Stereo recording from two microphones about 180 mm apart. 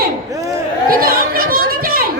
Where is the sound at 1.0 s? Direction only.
55° right (ahead or behind).